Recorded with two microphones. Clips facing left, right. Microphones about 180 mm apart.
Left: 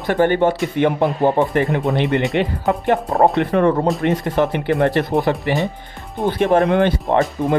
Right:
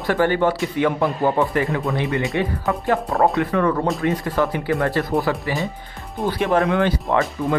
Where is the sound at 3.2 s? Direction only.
30° left (ahead or behind).